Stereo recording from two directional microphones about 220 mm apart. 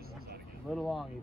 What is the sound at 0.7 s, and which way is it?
Speech, centre (ahead or behind).